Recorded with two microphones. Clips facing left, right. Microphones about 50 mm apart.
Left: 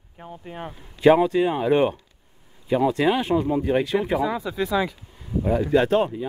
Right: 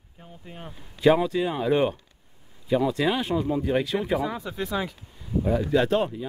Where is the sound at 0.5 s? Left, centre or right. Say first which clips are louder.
Left 6 dB; left.